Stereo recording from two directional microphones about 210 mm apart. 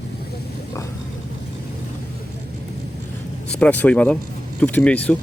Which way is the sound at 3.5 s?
5° left (ahead or behind).